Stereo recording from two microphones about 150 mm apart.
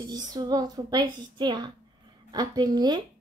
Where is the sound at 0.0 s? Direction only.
25° right (ahead or behind).